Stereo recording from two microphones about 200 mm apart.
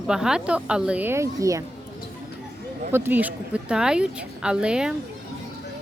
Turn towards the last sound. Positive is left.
turn(degrees=-5)  # may be behind; listen again after turning